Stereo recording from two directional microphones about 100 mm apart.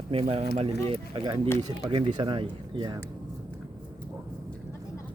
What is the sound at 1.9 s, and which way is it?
Speech, 50° right (ahead or behind).